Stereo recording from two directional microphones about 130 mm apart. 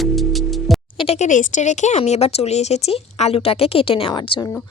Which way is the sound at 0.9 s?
45° left (ahead or behind).